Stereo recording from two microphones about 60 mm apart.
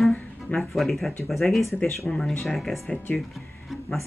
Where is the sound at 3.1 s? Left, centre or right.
Centre.